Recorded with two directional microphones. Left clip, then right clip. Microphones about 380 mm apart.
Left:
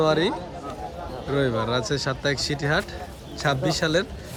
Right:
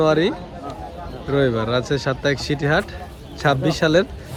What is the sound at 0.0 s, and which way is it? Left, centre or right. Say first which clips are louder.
Speech: right 4 dB; centre.